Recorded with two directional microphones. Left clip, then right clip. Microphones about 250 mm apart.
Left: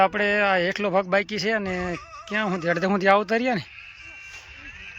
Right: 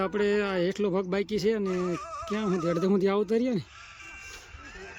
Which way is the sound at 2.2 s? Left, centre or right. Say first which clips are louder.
Left 6 dB; centre.